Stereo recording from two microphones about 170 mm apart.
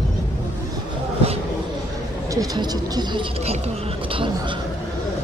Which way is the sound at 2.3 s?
20° right (ahead or behind).